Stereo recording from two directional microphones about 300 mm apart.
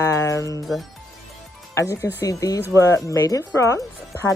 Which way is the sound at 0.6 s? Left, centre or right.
Centre.